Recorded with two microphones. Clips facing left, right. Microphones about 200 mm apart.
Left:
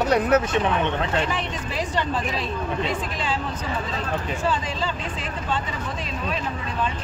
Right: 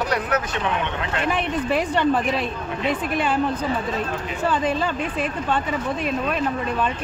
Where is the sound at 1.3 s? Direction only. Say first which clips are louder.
Right 6 dB; 60° right (ahead or behind).